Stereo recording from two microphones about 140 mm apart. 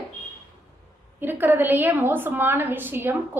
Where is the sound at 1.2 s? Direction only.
15° right (ahead or behind).